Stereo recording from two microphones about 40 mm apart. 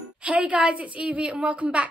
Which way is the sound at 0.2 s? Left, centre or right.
Right.